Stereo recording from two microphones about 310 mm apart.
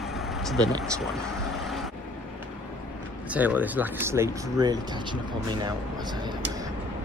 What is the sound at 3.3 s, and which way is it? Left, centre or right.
Speech, centre.